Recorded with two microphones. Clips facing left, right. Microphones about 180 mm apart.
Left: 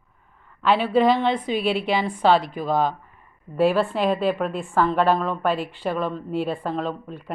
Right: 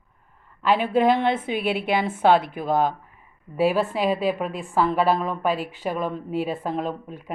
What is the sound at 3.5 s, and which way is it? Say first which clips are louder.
Speech: left 1 dB; 5° right (ahead or behind).